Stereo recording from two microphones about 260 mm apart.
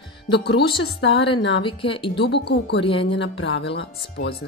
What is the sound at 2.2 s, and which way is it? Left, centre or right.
Speech, left.